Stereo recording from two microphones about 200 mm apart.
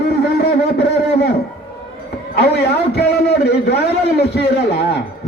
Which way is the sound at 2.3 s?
55° left (ahead or behind).